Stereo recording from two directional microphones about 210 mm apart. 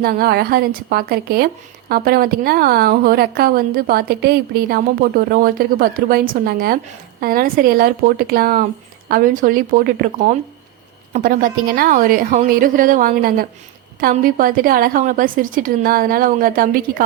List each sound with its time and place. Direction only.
0.0 s a woman's voice: 45° right (ahead or behind)